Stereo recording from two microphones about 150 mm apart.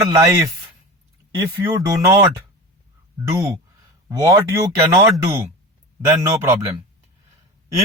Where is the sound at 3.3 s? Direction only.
20° right (ahead or behind).